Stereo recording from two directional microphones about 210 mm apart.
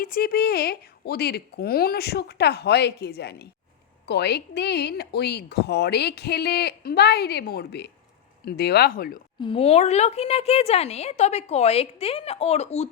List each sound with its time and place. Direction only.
0.0 s speech: 45° left (ahead or behind)
9.4 s speech: 25° left (ahead or behind)